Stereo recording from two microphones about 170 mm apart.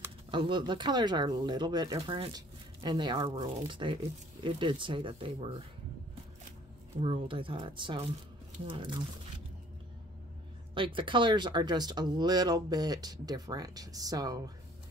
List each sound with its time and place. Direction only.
0.3 s speech: 30° right (ahead or behind)
7.0 s speech: 30° right (ahead or behind)
10.7 s speech: 30° right (ahead or behind)